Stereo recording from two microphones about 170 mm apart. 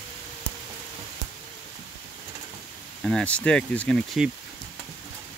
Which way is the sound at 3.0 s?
5° left (ahead or behind).